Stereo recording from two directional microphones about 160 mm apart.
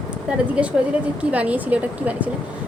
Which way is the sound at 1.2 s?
10° right (ahead or behind).